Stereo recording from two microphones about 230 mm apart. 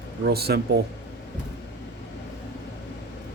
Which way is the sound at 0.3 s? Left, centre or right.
Right.